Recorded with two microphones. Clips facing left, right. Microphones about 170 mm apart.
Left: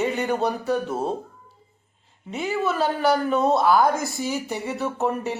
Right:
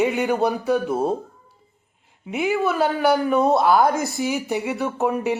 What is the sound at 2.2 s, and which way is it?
Speech, 15° right (ahead or behind).